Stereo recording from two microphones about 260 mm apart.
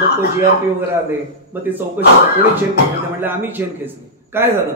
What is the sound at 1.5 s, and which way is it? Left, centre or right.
Speech, centre.